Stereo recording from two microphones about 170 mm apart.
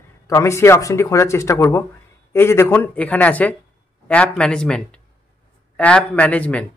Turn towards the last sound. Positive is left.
turn(degrees=10)  # may be behind; listen again after turning